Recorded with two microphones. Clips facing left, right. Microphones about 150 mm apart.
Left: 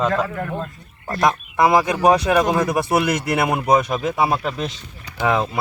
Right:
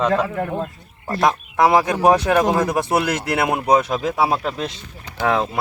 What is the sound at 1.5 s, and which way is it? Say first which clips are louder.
Speech: right 1 dB; 10° left (ahead or behind).